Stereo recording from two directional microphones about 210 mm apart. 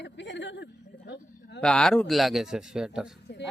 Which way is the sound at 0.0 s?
55° left (ahead or behind).